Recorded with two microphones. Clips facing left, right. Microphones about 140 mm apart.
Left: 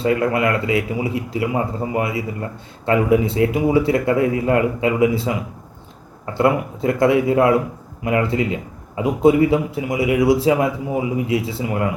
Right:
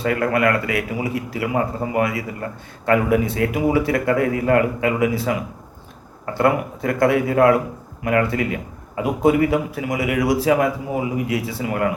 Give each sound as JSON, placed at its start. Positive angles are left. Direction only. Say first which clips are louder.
{"t": 0.0, "sound": "a man's voice", "louder": "left 1 dB", "side_deg": 25}